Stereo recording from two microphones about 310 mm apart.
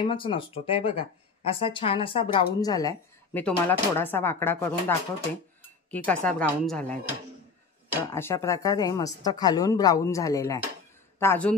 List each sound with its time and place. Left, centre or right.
0.0 s speech: centre
8.1 s speech: centre